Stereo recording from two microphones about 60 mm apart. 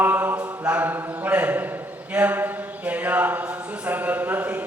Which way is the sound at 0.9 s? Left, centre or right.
Right.